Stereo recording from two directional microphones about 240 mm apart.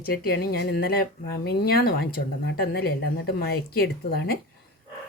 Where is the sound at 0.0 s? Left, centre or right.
Left.